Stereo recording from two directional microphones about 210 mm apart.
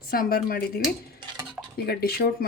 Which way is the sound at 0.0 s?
45° left (ahead or behind).